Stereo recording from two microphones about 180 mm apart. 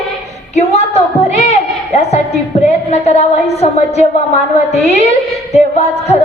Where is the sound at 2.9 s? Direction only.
35° left (ahead or behind).